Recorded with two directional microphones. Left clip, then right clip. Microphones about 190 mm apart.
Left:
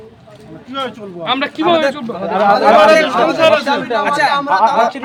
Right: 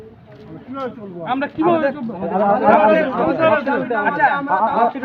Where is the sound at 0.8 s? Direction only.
30° left (ahead or behind).